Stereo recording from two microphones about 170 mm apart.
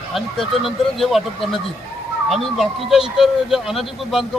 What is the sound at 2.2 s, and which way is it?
Speech, centre (ahead or behind).